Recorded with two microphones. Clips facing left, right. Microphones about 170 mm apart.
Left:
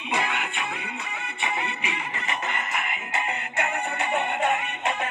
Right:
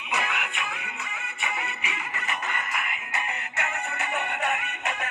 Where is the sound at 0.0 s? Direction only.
30° left (ahead or behind).